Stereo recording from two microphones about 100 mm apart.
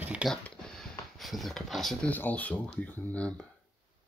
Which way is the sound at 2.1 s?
15° left (ahead or behind).